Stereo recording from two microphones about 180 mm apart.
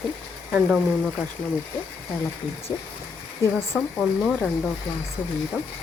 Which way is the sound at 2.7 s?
20° left (ahead or behind).